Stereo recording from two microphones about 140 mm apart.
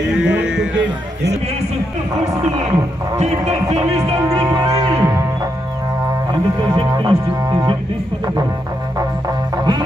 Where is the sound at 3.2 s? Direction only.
50° right (ahead or behind).